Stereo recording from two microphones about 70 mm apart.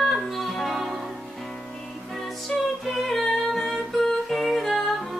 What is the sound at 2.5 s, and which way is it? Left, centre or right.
Music, centre.